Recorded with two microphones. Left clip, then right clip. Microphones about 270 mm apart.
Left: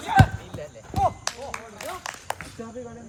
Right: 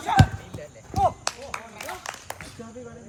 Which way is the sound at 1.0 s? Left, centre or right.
Right.